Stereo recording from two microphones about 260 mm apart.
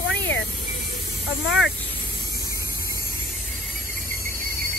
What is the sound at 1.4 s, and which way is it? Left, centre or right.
Speech, left.